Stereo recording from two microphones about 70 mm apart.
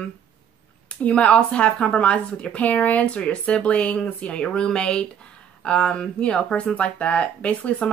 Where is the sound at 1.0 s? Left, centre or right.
Centre.